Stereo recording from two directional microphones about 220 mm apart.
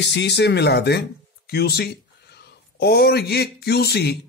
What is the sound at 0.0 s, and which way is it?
Speech, 50° left (ahead or behind).